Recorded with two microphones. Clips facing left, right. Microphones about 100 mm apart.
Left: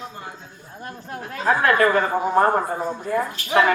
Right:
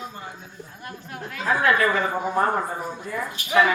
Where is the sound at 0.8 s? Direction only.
35° left (ahead or behind).